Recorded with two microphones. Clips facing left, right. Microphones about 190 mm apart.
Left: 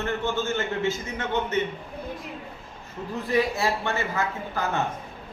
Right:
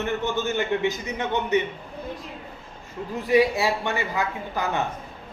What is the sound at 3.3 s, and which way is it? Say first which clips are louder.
A man's voice: right 4 dB; 15° right (ahead or behind).